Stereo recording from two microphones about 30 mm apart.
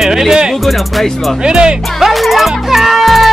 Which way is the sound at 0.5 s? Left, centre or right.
Centre.